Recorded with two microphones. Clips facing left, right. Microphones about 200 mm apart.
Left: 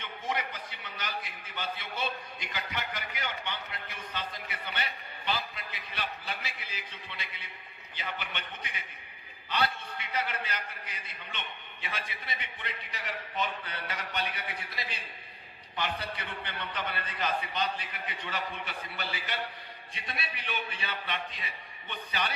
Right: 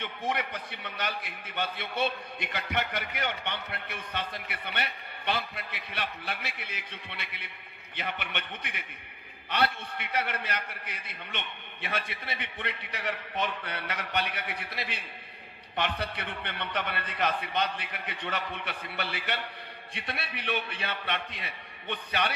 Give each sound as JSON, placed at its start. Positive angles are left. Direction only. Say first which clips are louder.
{"t": 0.0, "sound": "a man's voice", "louder": "right 3 dB", "side_deg": -60}